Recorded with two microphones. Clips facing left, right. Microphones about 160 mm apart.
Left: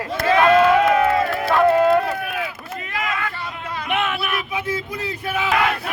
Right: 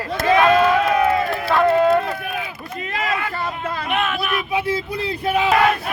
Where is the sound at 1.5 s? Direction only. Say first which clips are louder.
Even; 5° left (ahead or behind).